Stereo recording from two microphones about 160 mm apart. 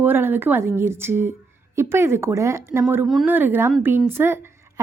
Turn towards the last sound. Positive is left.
turn(degrees=-15)  # may be behind; listen again after turning